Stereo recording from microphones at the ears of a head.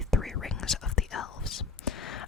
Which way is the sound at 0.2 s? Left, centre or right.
Left.